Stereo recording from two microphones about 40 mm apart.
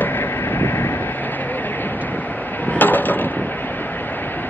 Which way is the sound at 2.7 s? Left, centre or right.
Left.